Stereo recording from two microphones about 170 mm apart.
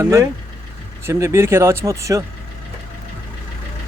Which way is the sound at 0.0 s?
15° right (ahead or behind).